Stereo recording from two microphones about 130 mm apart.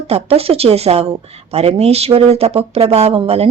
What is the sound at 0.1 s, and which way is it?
Speech, 50° right (ahead or behind).